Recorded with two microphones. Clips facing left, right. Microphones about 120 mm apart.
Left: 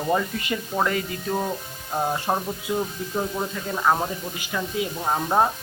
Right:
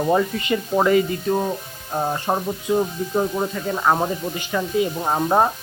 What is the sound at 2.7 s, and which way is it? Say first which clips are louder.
Speech: right 6 dB; 20° right (ahead or behind).